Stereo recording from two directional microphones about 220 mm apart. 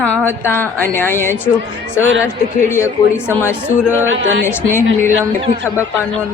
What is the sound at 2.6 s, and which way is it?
Speech, 10° left (ahead or behind).